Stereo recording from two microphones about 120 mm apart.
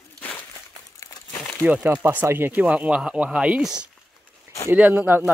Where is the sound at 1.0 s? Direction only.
25° left (ahead or behind).